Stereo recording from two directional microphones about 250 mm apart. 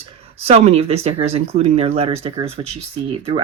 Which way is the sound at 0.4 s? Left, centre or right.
Right.